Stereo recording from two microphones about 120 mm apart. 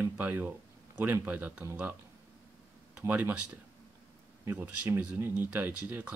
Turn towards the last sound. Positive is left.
turn(degrees=-15)  # may be behind; listen again after turning